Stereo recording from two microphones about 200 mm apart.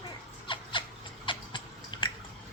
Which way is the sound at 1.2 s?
25° left (ahead or behind).